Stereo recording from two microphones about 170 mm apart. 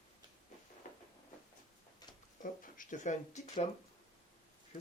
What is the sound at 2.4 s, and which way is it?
Speech, 50° left (ahead or behind).